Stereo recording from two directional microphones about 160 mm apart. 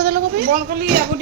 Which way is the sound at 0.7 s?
60° right (ahead or behind).